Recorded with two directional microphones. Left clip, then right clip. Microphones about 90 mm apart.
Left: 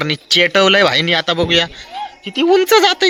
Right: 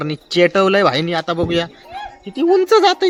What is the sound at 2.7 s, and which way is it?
Speech, 5° right (ahead or behind).